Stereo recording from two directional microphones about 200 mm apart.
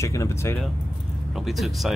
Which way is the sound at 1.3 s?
Centre (ahead or behind).